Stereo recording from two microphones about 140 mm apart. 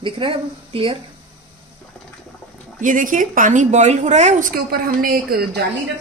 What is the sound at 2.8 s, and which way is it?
A woman's voice, 70° right (ahead or behind).